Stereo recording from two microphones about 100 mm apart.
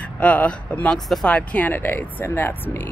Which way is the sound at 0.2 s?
15° left (ahead or behind).